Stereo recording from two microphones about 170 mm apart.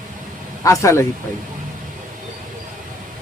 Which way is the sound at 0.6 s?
20° left (ahead or behind).